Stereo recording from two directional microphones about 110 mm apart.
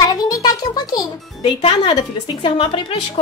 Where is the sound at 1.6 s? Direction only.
50° left (ahead or behind).